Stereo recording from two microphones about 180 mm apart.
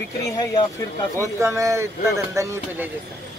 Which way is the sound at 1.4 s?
15° right (ahead or behind).